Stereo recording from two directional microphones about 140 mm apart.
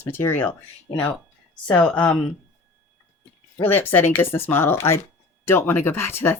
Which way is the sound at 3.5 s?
15° left (ahead or behind).